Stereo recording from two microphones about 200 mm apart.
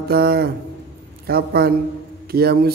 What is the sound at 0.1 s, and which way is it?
A man's voice, 50° right (ahead or behind).